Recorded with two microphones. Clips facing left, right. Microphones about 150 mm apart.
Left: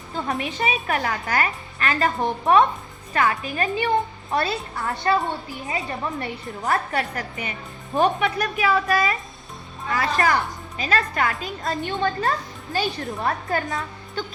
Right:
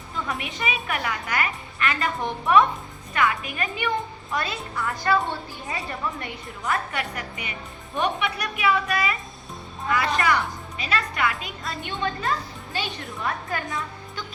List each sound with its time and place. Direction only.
0.1 s a woman's voice: 40° left (ahead or behind)
4.9 s a woman's voice: 25° left (ahead or behind)
6.1 s a woman's voice: 40° left (ahead or behind)